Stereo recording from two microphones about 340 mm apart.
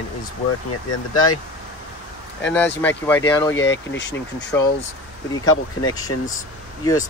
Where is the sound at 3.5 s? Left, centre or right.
Left.